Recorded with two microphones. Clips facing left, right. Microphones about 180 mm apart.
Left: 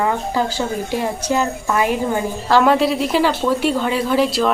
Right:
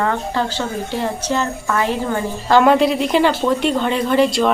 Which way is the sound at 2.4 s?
Centre (ahead or behind).